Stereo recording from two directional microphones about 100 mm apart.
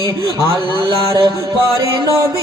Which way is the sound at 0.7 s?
55° right (ahead or behind).